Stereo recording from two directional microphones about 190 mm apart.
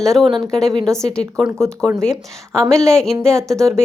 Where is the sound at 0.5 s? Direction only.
Centre (ahead or behind).